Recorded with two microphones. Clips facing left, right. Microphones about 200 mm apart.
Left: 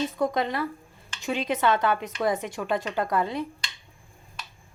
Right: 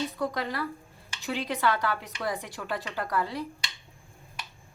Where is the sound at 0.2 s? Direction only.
20° left (ahead or behind).